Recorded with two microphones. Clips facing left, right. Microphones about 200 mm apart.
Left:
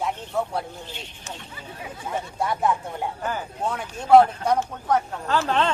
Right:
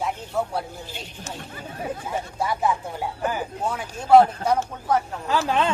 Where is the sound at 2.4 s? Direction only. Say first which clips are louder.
Even; centre (ahead or behind).